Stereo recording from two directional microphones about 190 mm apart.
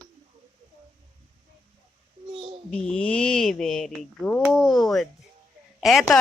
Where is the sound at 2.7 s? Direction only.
5° left (ahead or behind).